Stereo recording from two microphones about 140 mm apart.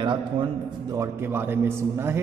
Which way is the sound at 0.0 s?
35° right (ahead or behind).